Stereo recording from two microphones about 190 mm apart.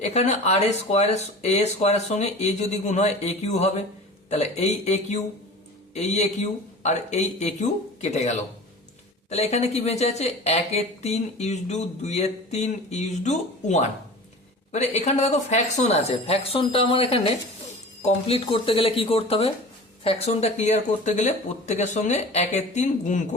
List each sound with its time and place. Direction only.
0.0 s speech: 35° left (ahead or behind)